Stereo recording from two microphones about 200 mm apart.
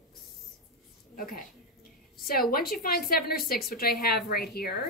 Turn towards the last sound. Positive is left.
turn(degrees=50)  # may be behind; listen again after turning